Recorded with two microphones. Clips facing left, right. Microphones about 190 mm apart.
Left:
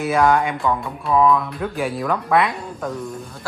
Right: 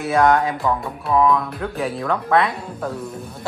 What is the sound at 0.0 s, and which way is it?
Speech, centre (ahead or behind).